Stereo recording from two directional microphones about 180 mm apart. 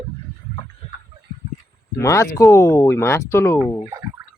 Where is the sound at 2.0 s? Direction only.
15° left (ahead or behind).